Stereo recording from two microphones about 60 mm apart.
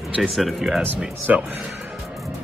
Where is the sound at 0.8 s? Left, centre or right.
Right.